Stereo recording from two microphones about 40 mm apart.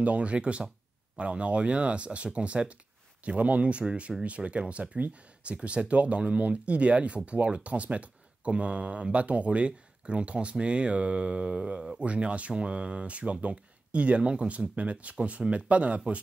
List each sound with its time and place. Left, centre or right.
0.0 s speech: right